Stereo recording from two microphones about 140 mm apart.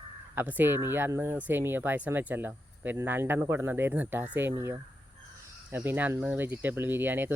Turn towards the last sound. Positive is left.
turn(degrees=-15)  # may be behind; listen again after turning